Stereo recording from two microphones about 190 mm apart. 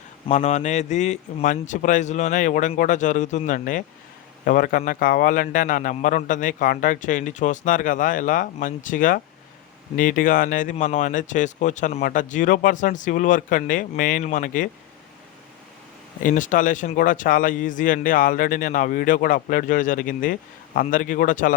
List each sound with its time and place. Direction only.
0.3 s speech: 40° left (ahead or behind)
16.2 s speech: 45° left (ahead or behind)